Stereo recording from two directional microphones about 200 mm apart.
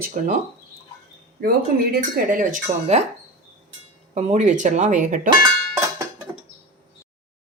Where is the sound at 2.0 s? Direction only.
40° right (ahead or behind).